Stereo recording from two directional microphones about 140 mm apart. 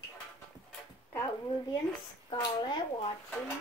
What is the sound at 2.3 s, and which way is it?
Speech, 30° left (ahead or behind).